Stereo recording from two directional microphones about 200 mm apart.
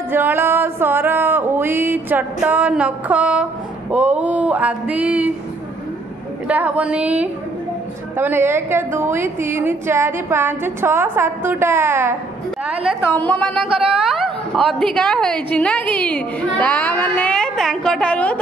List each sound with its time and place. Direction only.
0.1 s a woman's voice: 10° right (ahead or behind)
6.4 s a woman's voice: 5° right (ahead or behind)
13.2 s a woman's voice: 5° left (ahead or behind)
13.7 s a woman's voice: 25° right (ahead or behind)
14.5 s a woman's voice: centre (ahead or behind)